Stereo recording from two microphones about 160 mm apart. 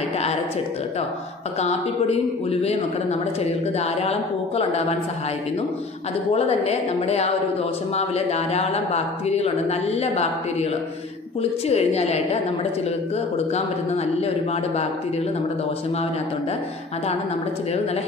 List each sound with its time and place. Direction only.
1.6 s speech: 45° left (ahead or behind)
6.3 s speech: 40° left (ahead or behind)
13.5 s speech: 40° left (ahead or behind)